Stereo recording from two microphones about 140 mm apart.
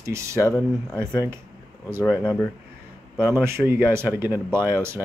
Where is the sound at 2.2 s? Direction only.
10° left (ahead or behind).